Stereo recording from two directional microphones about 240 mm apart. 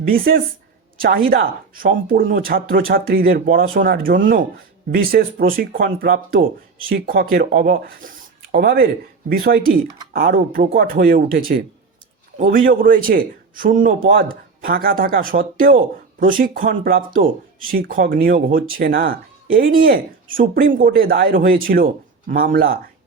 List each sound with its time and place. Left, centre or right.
0.1 s speech: right